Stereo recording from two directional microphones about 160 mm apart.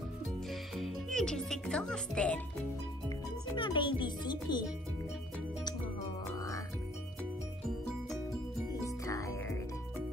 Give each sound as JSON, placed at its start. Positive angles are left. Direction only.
{"t": 0.5, "sound": "music", "side_deg": 0}
{"t": 3.5, "sound": "a child's voice", "side_deg": 30}
{"t": 6.2, "sound": "music", "side_deg": 20}
{"t": 8.8, "sound": "music", "side_deg": 20}